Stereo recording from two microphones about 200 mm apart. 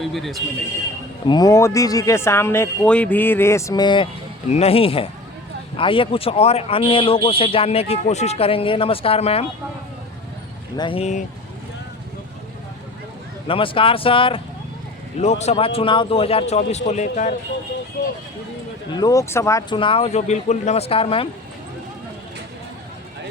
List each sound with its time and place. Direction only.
0.0 s speech: centre (ahead or behind)
1.3 s speech: 20° left (ahead or behind)
10.8 s a man's voice: 25° left (ahead or behind)
13.5 s a man's voice: 25° left (ahead or behind)
18.0 s speech: 55° left (ahead or behind)
18.9 s speech: 20° left (ahead or behind)